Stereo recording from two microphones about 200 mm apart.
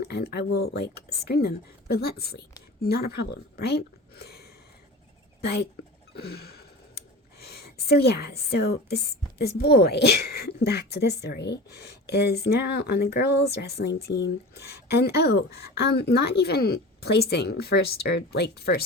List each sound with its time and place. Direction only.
0.1 s speech: 55° left (ahead or behind)
5.4 s a sound: 55° left (ahead or behind)
9.4 s speech: 50° left (ahead or behind)